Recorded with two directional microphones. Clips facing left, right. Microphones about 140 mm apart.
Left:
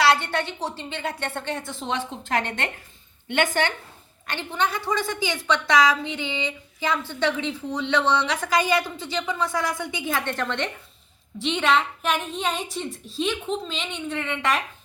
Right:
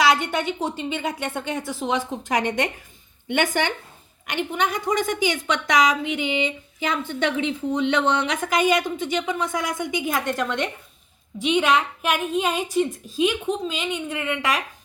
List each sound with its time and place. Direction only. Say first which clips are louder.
0.0 s a woman's voice: right 1 dB; 15° right (ahead or behind)